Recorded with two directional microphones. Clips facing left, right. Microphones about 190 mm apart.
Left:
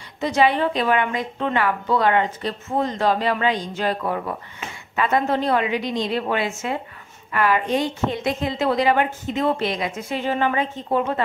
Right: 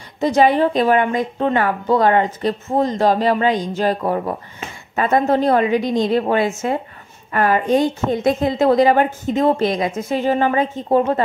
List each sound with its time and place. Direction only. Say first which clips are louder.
0.2 s a woman's voice: right 5 dB; 45° right (ahead or behind)